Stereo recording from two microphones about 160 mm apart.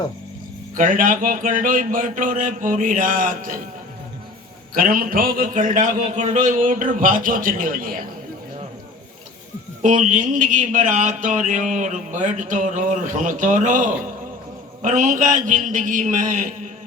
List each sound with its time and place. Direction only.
0.8 s a man's voice: 60° right (ahead or behind)
4.7 s a man's voice: 60° right (ahead or behind)
9.8 s a sound: 50° right (ahead or behind)